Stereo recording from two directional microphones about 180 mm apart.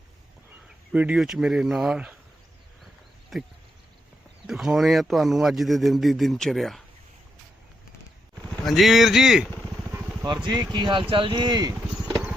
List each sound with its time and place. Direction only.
0.9 s a man's voice: 5° right (ahead or behind)
3.3 s a man's voice: centre (ahead or behind)
8.6 s a man's voice: centre (ahead or behind)
10.2 s speech: 20° right (ahead or behind)